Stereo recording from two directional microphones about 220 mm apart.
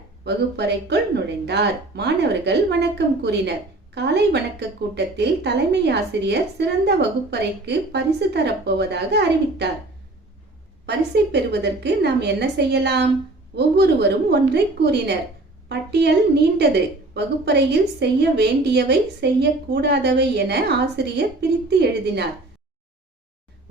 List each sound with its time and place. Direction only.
0.3 s a woman's voice: 50° right (ahead or behind)
10.8 s a woman's voice: 50° right (ahead or behind)